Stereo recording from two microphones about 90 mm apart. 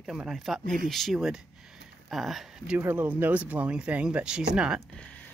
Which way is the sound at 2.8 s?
20° right (ahead or behind).